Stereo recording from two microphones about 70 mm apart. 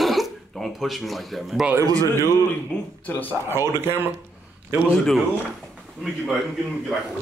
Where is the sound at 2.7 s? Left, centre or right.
Centre.